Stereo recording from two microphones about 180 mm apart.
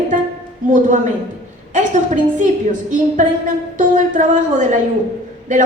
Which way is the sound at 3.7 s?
45° right (ahead or behind).